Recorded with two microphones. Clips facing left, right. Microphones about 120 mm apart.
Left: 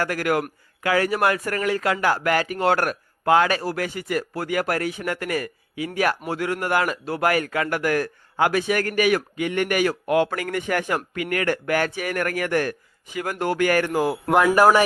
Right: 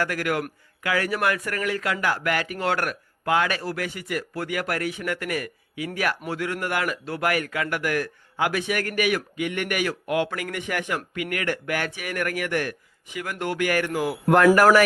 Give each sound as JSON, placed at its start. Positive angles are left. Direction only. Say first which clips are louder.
{"t": 0.0, "sound": "speech", "louder": "left 3 dB", "side_deg": 30}
{"t": 14.3, "sound": "a man's voice", "louder": "right 1 dB", "side_deg": 10}